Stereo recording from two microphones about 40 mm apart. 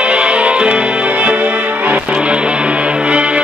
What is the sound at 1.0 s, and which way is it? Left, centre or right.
Music, right.